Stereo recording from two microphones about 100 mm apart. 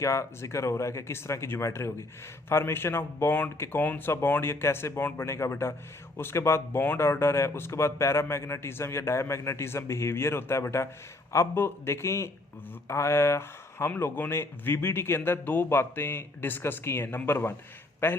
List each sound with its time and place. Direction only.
0.0 s speech: 30° left (ahead or behind)